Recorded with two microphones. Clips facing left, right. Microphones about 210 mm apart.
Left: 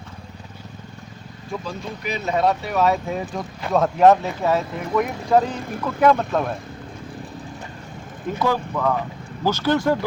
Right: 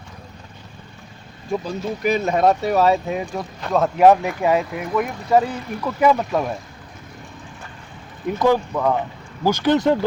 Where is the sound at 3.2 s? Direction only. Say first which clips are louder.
Right 1 dB; centre (ahead or behind).